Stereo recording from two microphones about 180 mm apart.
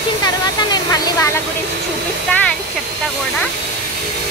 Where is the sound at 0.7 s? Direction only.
20° left (ahead or behind).